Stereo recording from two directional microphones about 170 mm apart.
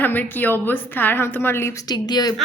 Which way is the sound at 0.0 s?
10° left (ahead or behind).